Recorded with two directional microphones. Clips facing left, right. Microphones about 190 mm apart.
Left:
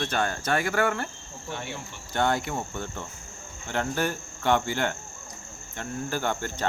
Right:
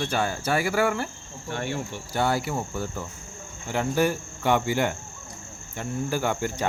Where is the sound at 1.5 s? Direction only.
55° right (ahead or behind).